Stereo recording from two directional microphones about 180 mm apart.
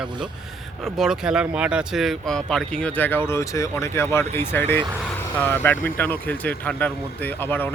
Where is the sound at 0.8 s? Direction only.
Centre (ahead or behind).